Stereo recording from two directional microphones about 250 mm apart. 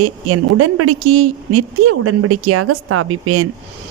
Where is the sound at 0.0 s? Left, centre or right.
Right.